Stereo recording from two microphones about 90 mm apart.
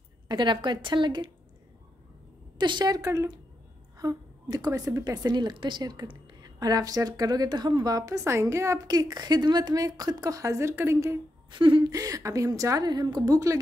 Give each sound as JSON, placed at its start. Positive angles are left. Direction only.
{"t": 0.3, "sound": "a woman's voice", "side_deg": -60}
{"t": 2.6, "sound": "a woman's voice", "side_deg": -55}
{"t": 8.8, "sound": "a woman's voice", "side_deg": -50}
{"t": 11.5, "sound": "a woman's voice", "side_deg": -65}
{"t": 11.9, "sound": "a woman's voice", "side_deg": -40}